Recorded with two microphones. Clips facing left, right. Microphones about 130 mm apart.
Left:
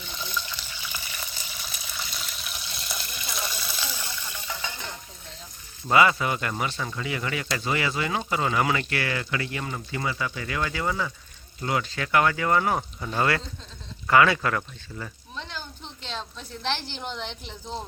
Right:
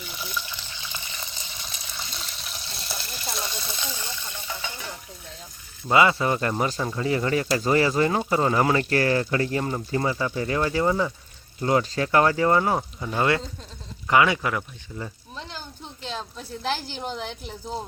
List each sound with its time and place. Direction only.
0.1 s water: 15° right (ahead or behind)
4.0 s stir: 20° right (ahead or behind)
5.9 s speech: 25° right (ahead or behind)
13.0 s a woman's voice: 10° right (ahead or behind)
15.8 s a woman's voice: 5° right (ahead or behind)